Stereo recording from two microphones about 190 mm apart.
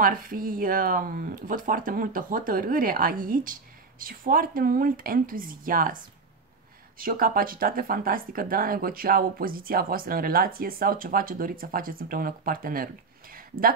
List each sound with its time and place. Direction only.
0.0 s speech: 45° right (ahead or behind)
7.0 s speech: 50° right (ahead or behind)